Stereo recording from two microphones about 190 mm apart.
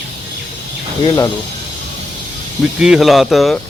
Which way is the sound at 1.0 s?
15° left (ahead or behind).